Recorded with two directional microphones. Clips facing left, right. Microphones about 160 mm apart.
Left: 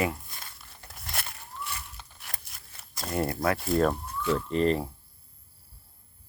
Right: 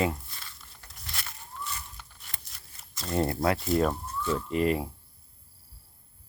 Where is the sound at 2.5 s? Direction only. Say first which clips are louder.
Left 2 dB; 60° left (ahead or behind).